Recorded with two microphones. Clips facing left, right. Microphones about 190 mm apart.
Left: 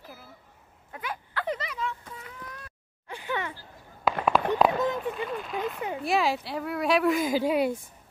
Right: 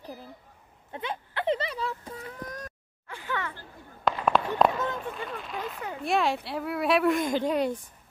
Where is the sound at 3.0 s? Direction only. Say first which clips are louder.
Left 2 dB; 15° left (ahead or behind).